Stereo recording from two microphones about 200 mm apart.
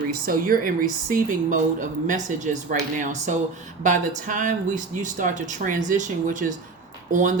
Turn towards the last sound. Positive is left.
turn(degrees=-40)  # may be behind; listen again after turning